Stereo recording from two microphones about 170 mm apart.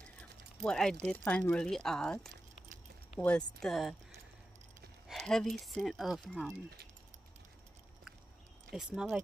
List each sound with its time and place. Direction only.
0.2 s a sound: 5° left (ahead or behind)
1.0 s speech: 10° left (ahead or behind)
5.0 s speech: centre (ahead or behind)
8.7 s speech: 75° right (ahead or behind)